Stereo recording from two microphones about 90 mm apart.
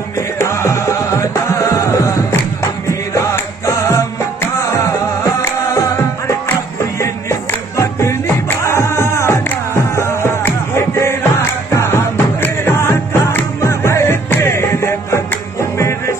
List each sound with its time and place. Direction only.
0.4 s music: 35° left (ahead or behind)